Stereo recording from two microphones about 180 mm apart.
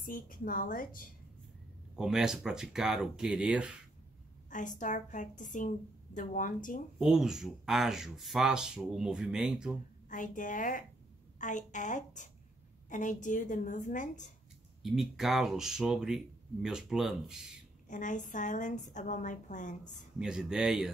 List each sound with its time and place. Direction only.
0.0 s a woman's voice: 50° left (ahead or behind)
2.0 s speech: centre (ahead or behind)
4.5 s a woman's voice: 45° left (ahead or behind)
7.0 s speech: centre (ahead or behind)
10.0 s a woman's voice: 45° left (ahead or behind)
14.8 s speech: centre (ahead or behind)
17.8 s a woman's voice: 45° left (ahead or behind)
20.2 s speech: 5° right (ahead or behind)